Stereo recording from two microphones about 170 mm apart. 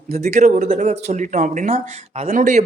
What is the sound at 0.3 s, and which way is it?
A man's voice, 45° right (ahead or behind).